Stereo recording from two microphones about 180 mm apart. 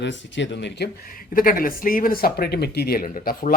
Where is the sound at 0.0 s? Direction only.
80° left.